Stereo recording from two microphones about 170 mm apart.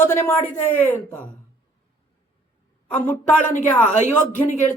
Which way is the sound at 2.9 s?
10° left (ahead or behind).